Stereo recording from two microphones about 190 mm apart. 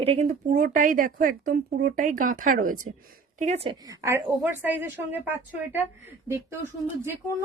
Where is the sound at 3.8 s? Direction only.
15° right (ahead or behind).